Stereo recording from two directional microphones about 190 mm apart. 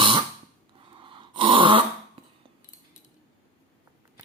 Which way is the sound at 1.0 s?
25° right (ahead or behind).